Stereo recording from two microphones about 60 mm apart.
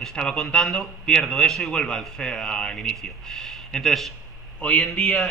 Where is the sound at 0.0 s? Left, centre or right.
Centre.